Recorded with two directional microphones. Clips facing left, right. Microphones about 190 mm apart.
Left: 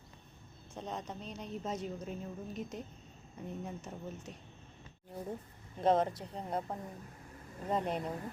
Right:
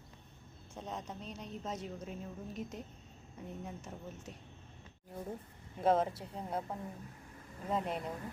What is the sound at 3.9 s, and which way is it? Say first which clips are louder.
Speech: left 2 dB; centre (ahead or behind).